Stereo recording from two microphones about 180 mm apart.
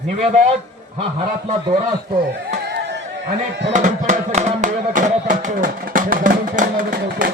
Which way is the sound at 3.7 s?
45° right (ahead or behind).